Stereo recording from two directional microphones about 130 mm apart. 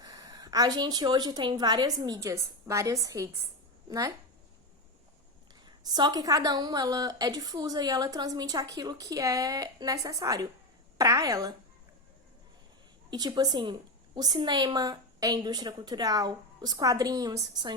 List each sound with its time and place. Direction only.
0.0 s a woman's voice: 30° right (ahead or behind)
5.9 s a woman's voice: 30° right (ahead or behind)
13.1 s a woman's voice: 30° right (ahead or behind)